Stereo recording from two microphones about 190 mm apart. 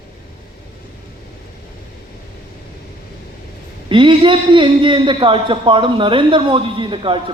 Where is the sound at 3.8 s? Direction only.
25° right (ahead or behind).